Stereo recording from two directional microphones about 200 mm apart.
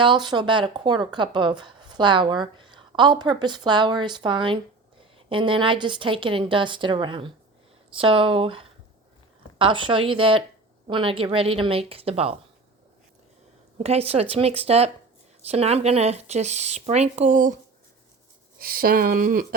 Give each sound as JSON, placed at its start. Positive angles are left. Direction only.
{"t": 0.0, "sound": "speech", "side_deg": -25}
{"t": 13.7, "sound": "speech", "side_deg": -30}
{"t": 18.6, "sound": "speech", "side_deg": -45}